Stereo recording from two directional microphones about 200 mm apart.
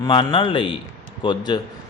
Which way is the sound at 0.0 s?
20° left (ahead or behind).